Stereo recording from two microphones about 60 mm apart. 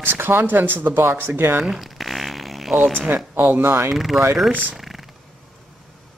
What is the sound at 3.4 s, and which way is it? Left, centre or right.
Speech, right.